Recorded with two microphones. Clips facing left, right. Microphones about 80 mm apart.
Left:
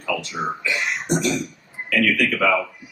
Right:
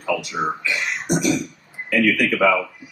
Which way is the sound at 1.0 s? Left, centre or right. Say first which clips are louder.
Right 3 dB; centre.